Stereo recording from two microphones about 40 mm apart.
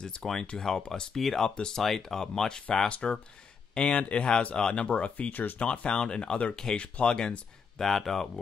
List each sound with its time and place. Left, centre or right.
0.2 s speech: centre
1.2 s speech: centre; by 4.9 s left
4.9 s speech: left
5.3 s speech: left
5.6 s speech: left
6.5 s speech: centre
7.7 s speech: centre